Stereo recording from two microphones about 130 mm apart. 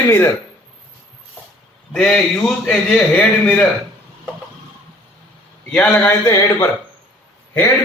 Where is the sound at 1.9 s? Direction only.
5° left (ahead or behind).